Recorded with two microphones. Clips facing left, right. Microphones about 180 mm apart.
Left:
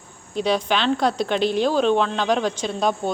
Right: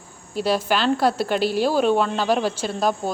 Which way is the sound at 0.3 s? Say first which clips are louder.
Even; 5° right (ahead or behind).